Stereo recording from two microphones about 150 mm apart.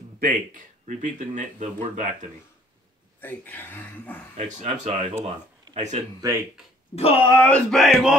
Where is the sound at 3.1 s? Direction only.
10° left (ahead or behind).